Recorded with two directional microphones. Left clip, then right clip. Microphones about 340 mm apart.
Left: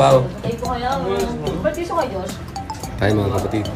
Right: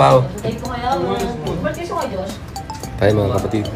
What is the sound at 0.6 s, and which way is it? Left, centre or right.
Speech, centre.